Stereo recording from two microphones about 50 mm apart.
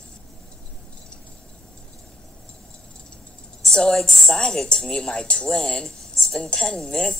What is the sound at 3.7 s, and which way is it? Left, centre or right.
A woman's voice, centre.